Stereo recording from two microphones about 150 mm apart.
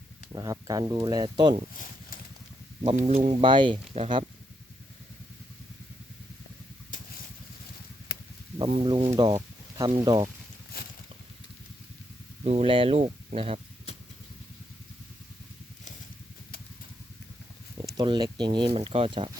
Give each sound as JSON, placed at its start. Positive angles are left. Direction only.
{"t": 0.3, "sound": "speech", "side_deg": -25}
{"t": 1.7, "sound": "a sound", "side_deg": 65}
{"t": 2.9, "sound": "speech", "side_deg": -50}
{"t": 3.4, "sound": "speech", "side_deg": -30}
{"t": 6.9, "sound": "vehicle", "side_deg": 60}
{"t": 8.8, "sound": "speech", "side_deg": -35}
{"t": 9.1, "sound": "a sound", "side_deg": -25}
{"t": 10.0, "sound": "speech", "side_deg": -25}
{"t": 10.7, "sound": "a sound", "side_deg": 90}
{"t": 12.5, "sound": "speech", "side_deg": -40}
{"t": 17.8, "sound": "speech", "side_deg": -30}